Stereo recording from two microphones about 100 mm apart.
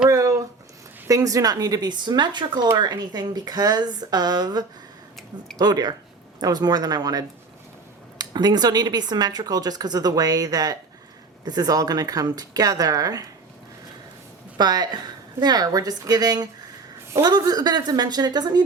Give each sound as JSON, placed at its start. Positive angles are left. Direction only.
{"t": 0.1, "sound": "a sound", "side_deg": -35}
{"t": 1.0, "sound": "speech", "side_deg": -35}
{"t": 14.6, "sound": "speech", "side_deg": -45}